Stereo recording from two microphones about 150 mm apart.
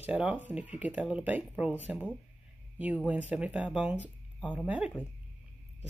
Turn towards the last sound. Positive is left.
turn(degrees=-10)  # may be behind; listen again after turning